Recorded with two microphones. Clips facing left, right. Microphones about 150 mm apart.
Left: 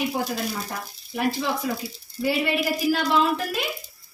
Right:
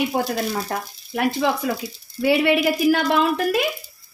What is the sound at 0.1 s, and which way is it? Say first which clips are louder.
A woman's voice: right 4 dB; 55° right (ahead or behind).